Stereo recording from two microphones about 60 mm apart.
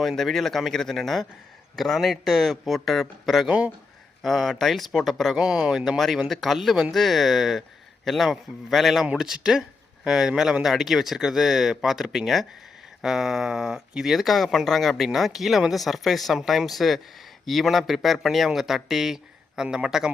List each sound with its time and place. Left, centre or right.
0.2 s speech: centre
5.4 s speech: centre